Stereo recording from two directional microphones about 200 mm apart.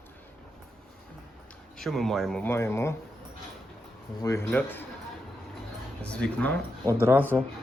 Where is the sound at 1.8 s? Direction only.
Centre (ahead or behind).